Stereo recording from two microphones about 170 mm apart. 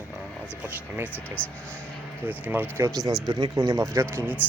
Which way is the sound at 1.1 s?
10° left (ahead or behind).